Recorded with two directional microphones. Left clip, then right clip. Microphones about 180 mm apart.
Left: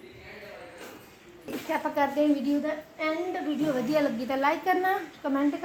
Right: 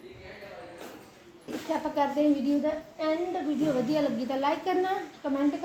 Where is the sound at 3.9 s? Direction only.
20° left (ahead or behind).